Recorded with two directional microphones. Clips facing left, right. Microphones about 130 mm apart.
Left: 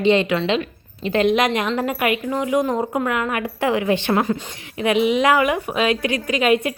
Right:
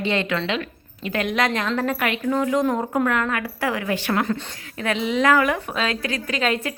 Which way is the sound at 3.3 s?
20° left (ahead or behind).